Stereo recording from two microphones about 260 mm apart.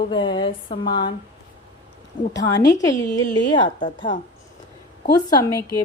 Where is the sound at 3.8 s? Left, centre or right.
Left.